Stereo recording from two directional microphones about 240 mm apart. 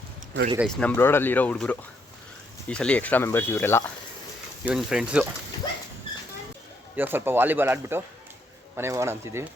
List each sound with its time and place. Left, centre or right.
0.6 s speech: centre
4.6 s speech: centre
6.9 s speech: centre